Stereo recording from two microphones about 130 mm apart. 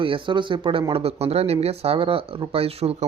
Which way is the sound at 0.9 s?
50° right (ahead or behind).